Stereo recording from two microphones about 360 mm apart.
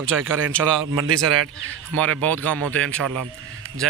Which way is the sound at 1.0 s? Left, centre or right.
Right.